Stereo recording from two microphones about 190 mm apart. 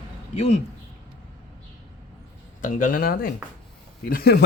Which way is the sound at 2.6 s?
45° left (ahead or behind).